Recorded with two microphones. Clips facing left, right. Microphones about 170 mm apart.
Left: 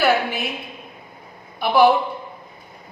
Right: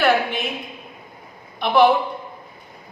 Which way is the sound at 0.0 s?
5° left (ahead or behind).